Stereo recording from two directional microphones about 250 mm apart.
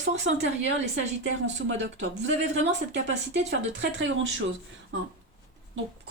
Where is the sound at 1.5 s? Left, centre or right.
Right.